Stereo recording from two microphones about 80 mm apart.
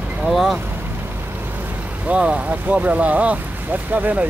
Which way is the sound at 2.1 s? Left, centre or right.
Centre.